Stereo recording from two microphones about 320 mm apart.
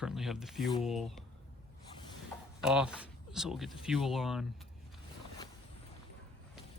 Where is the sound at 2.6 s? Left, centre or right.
Centre.